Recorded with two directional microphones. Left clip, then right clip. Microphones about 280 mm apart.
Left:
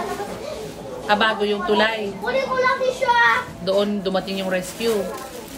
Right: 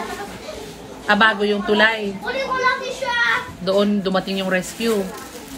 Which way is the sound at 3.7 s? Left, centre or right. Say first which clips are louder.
Right 2 dB; right.